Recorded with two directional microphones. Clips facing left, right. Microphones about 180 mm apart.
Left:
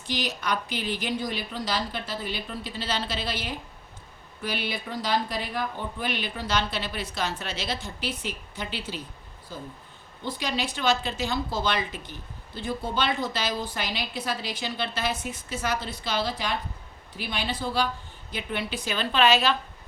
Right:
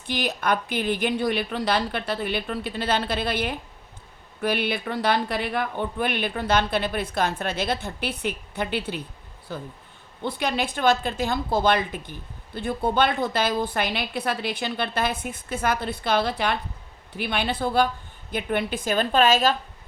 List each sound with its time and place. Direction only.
0.1 s a woman's voice: 55° right (ahead or behind)